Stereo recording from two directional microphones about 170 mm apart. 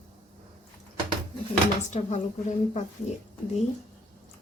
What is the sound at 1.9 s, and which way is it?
Cutlery, 45° left (ahead or behind).